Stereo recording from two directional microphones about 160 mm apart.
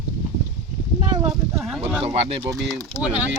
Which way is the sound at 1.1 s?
25° right (ahead or behind).